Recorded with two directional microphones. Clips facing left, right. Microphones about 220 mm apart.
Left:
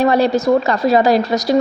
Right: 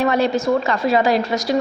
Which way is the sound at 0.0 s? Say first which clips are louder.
Left 4 dB; 35° left (ahead or behind).